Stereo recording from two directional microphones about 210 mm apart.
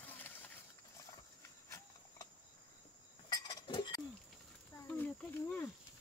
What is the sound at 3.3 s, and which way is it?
Chink, 20° left (ahead or behind).